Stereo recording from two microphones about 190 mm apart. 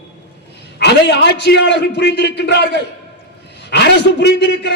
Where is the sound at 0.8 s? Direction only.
60° left (ahead or behind).